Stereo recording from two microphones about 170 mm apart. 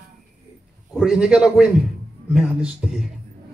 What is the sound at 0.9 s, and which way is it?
A man's voice, 5° right (ahead or behind).